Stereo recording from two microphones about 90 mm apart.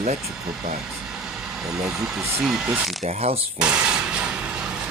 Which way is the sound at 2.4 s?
5° right (ahead or behind).